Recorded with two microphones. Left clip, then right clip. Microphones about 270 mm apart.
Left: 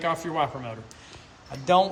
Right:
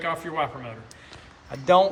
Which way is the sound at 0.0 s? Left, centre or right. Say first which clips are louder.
Left 1 dB; centre.